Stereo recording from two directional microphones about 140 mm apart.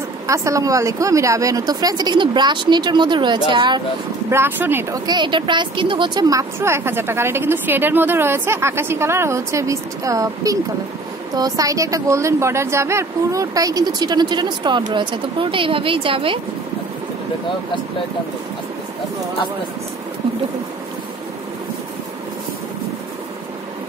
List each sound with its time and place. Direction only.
0.3 s speech: 20° right (ahead or behind)
4.3 s speech: 15° right (ahead or behind)
5.0 s speech: 35° right (ahead or behind)